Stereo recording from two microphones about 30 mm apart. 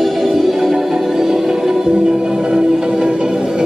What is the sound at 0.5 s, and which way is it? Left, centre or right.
Music, centre.